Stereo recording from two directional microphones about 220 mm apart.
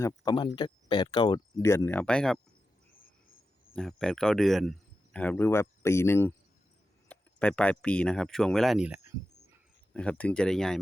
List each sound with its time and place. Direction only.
0.0 s speech: 15° left (ahead or behind)
3.8 s speech: 5° left (ahead or behind)